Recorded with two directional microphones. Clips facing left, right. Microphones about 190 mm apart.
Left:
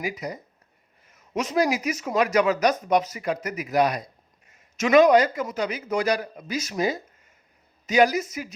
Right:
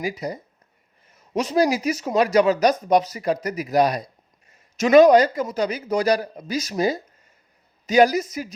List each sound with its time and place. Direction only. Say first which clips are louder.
0.0 s speech: right 3 dB; 30° right (ahead or behind)